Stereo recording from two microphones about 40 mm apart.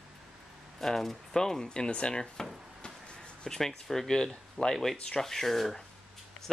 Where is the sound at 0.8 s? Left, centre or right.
Centre.